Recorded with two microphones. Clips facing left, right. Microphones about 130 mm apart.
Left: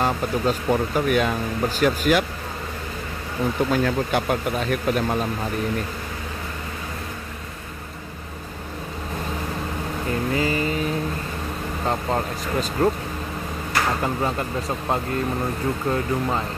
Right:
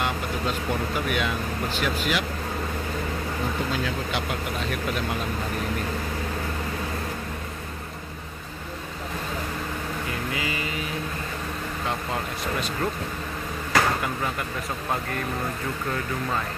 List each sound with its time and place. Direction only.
0.0 s speech: 40° left (ahead or behind)
3.7 s speech: 50° left (ahead or behind)
10.3 s speech: 40° left (ahead or behind)
11.9 s speech: 35° left (ahead or behind)
15.9 s speech: 25° left (ahead or behind)